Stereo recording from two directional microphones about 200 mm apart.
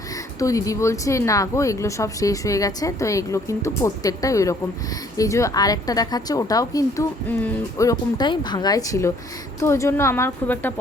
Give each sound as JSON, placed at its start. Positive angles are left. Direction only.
{"t": 0.3, "sound": "speech", "side_deg": 15}